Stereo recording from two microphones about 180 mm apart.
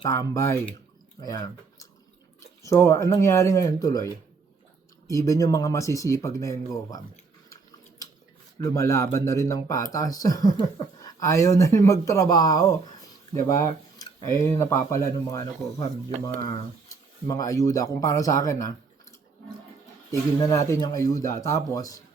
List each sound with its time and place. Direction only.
0.0 s speech: 15° left (ahead or behind)
2.4 s speech: 15° left (ahead or behind)
8.6 s speech: 15° left (ahead or behind)
14.3 s speech: 15° left (ahead or behind)
20.1 s speech: 20° left (ahead or behind)